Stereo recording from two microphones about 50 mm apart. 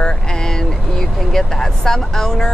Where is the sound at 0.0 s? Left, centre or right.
Centre.